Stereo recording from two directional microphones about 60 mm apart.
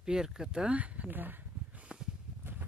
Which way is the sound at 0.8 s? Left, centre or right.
Right.